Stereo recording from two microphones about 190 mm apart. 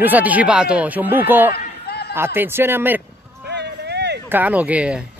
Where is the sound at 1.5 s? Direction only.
55° left (ahead or behind).